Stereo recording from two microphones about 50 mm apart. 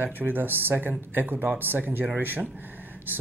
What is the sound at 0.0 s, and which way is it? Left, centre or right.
Speech, right.